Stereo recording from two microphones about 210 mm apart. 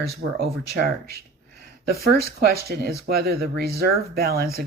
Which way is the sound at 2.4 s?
45° right (ahead or behind).